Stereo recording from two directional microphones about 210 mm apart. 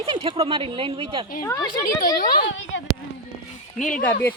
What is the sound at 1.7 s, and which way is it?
Speech, 40° left (ahead or behind).